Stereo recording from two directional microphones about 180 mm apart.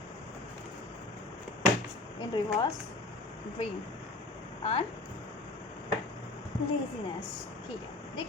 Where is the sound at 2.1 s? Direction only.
25° left (ahead or behind).